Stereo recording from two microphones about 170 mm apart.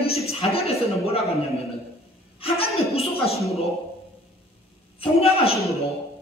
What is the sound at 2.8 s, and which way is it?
Speech, 35° left (ahead or behind).